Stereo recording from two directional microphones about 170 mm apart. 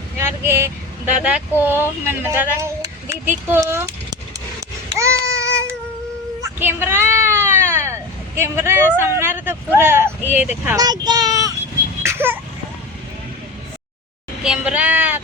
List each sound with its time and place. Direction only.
0.4 s speech: 15° right (ahead or behind)
4.9 s babbling: 15° right (ahead or behind)
6.4 s speech: 15° right (ahead or behind)
10.8 s a sound: 25° right (ahead or behind)
12.0 s vehicle: 15° right (ahead or behind)
14.4 s a sound: 5° right (ahead or behind)